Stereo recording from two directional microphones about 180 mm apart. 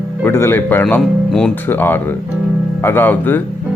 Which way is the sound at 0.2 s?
15° left (ahead or behind).